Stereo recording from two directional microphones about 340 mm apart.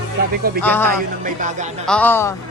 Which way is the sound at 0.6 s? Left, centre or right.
Centre.